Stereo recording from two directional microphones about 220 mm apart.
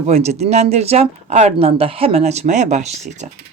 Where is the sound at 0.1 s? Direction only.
30° right (ahead or behind).